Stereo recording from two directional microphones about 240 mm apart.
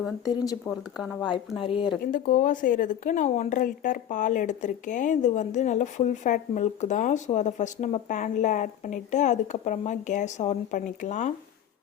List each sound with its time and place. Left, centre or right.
0.7 s speech: centre
1.2 s speech: centre
2.0 s speech: left